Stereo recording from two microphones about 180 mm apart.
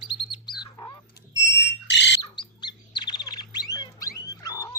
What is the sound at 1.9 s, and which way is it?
Squawk, 80° left.